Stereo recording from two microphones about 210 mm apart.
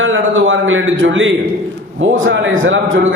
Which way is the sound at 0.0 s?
65° right (ahead or behind).